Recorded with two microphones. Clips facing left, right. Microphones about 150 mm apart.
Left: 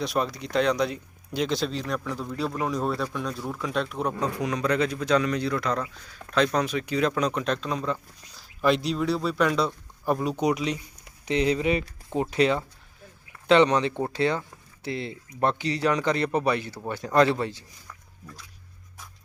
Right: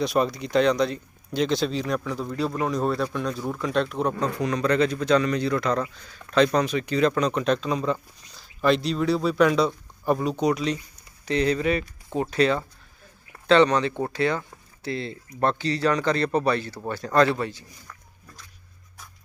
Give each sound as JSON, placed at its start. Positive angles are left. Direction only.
{"t": 0.0, "sound": "speech", "side_deg": 0}
{"t": 10.3, "sound": "speech", "side_deg": 15}